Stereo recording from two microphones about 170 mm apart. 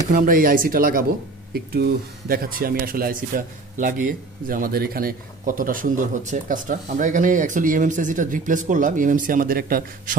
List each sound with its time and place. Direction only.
0.1 s speech: 55° right (ahead or behind)